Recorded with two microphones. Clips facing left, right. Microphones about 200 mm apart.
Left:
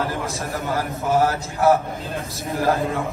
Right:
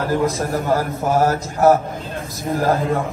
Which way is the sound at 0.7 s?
45° right (ahead or behind).